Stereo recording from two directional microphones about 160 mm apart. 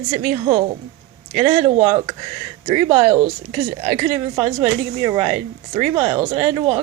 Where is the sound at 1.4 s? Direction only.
35° right (ahead or behind).